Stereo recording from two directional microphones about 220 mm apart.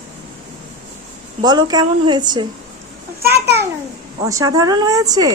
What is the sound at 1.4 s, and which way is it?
A woman's voice, 20° right (ahead or behind).